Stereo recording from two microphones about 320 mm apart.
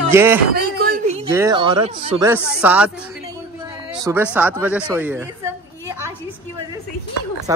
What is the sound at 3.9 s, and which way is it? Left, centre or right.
A woman's voice, centre.